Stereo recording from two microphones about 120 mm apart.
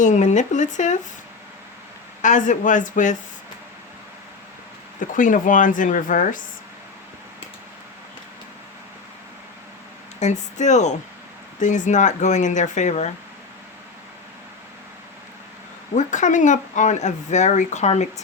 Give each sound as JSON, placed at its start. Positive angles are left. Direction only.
{"t": 0.0, "sound": "speech", "side_deg": 85}
{"t": 2.2, "sound": "speech", "side_deg": 90}
{"t": 4.9, "sound": "speech", "side_deg": 90}
{"t": 10.2, "sound": "speech", "side_deg": 75}
{"t": 11.6, "sound": "speech", "side_deg": 90}
{"t": 16.0, "sound": "speech", "side_deg": 90}